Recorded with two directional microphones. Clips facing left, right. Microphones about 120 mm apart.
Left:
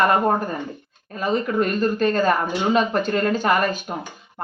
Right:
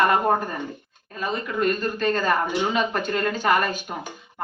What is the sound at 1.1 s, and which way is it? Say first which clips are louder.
Speech: left 5 dB; 40° left (ahead or behind).